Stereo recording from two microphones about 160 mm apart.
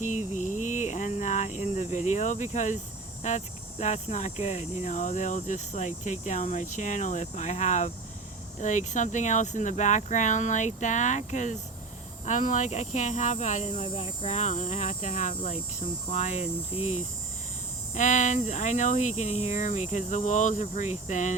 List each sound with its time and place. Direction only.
0.4 s a sound: 50° left (ahead or behind)
3.2 s cricket: 50° left (ahead or behind)
17.9 s cricket: 50° left (ahead or behind)